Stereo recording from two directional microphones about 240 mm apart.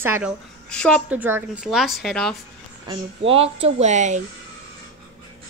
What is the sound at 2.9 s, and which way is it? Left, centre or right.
Speech, right.